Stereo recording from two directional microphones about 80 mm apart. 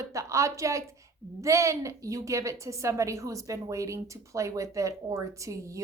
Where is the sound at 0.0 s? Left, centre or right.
Right.